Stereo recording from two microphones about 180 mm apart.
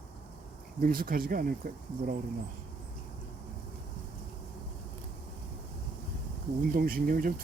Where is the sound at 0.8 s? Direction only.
55° right (ahead or behind).